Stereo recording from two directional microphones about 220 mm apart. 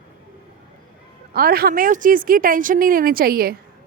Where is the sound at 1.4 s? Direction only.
45° right (ahead or behind).